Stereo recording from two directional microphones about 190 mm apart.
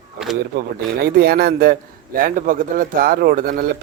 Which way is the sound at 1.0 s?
55° right (ahead or behind).